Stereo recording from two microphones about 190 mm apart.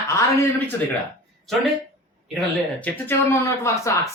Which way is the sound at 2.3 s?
Centre (ahead or behind).